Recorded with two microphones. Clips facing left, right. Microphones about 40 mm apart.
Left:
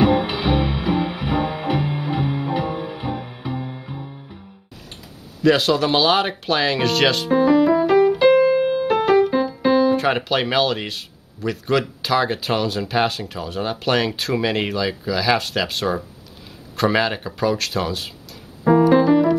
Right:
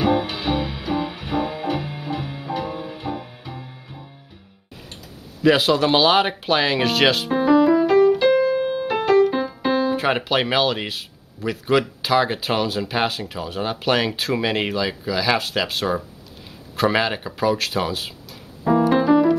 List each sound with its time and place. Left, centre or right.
0.0 s music: left
5.4 s speech: centre
8.2 s keyboard: centre
9.3 s keyboard: centre
9.8 s speech: centre
18.6 s music: centre
18.9 s music: centre